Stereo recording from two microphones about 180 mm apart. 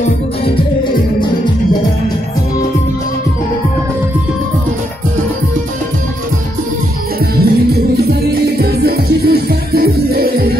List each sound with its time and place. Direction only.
7.4 s music: 60° right (ahead or behind)